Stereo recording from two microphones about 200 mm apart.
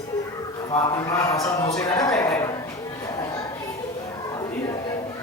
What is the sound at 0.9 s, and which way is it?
Speech, 15° left (ahead or behind).